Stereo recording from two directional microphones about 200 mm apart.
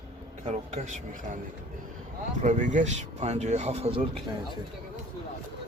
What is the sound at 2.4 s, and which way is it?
Speech, 40° right (ahead or behind).